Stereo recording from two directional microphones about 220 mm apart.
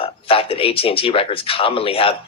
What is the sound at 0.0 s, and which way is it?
A man's voice, 25° left (ahead or behind).